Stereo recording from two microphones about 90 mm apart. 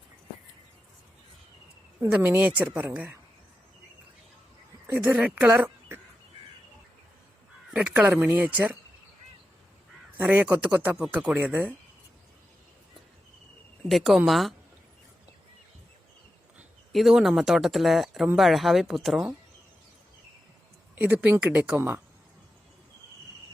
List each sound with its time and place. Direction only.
2.0 s a woman's voice: 20° right (ahead or behind)
4.9 s speech: 15° right (ahead or behind)
7.7 s speech: 15° right (ahead or behind)
10.2 s a woman's voice: 15° right (ahead or behind)
13.8 s speech: centre (ahead or behind)
16.9 s speech: centre (ahead or behind)
20.9 s a woman's voice: 20° right (ahead or behind)